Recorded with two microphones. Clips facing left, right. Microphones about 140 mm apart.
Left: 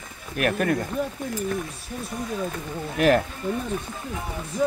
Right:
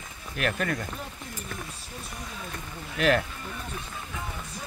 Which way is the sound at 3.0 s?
45° left (ahead or behind).